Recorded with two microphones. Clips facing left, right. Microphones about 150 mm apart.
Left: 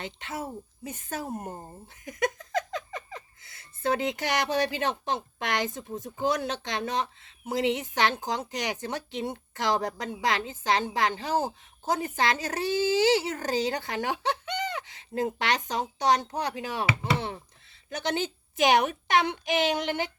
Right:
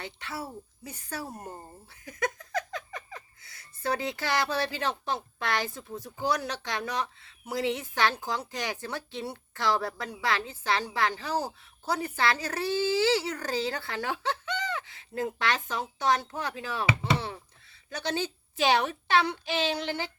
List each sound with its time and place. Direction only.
0.0 s a woman's voice: 20° left (ahead or behind)